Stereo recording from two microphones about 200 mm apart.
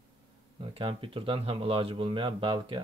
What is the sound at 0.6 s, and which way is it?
Speech, 25° right (ahead or behind).